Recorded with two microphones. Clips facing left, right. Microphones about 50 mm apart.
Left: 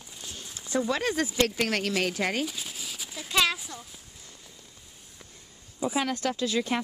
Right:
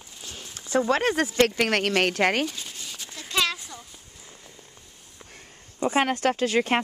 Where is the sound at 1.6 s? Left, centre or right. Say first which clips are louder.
Right 5 dB; right.